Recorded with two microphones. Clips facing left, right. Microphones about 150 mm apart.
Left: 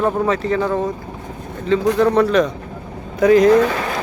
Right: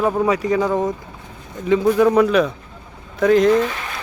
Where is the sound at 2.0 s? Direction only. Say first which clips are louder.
Left 1 dB; 10° right (ahead or behind).